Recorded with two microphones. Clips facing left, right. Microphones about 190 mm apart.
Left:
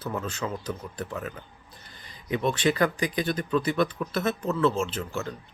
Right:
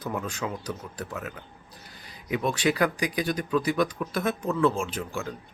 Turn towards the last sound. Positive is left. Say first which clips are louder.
# even
turn(degrees=-10)  # may be behind; listen again after turning